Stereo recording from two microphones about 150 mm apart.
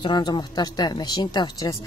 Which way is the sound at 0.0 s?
30° left (ahead or behind).